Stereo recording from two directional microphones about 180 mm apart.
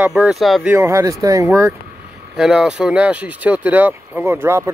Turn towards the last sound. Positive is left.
turn(degrees=-15)  # may be behind; listen again after turning